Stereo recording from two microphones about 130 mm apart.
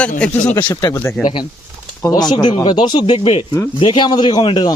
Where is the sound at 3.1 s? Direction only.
50° left (ahead or behind).